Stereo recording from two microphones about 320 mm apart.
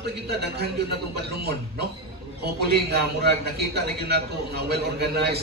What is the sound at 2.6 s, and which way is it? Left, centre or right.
A man's voice, right.